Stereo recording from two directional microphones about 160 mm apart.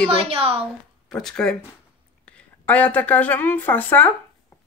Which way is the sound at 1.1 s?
5° left (ahead or behind).